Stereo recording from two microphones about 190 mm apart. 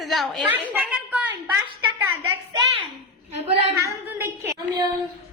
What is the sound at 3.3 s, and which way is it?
Speech, 35° right (ahead or behind).